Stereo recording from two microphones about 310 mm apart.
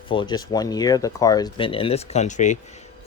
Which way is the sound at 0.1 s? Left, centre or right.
Centre.